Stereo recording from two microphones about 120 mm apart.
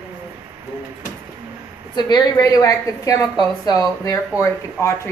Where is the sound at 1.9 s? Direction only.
35° left (ahead or behind).